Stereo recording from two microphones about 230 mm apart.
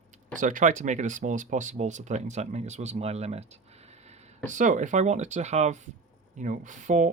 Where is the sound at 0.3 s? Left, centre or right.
Right.